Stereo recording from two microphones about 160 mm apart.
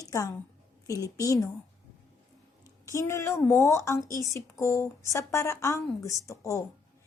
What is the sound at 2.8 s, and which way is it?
A woman's voice, 20° left (ahead or behind).